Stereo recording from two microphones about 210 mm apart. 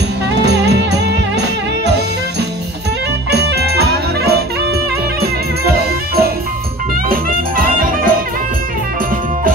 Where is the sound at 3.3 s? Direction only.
50° right (ahead or behind).